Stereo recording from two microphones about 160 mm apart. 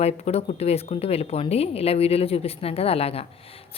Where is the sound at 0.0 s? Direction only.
40° left (ahead or behind).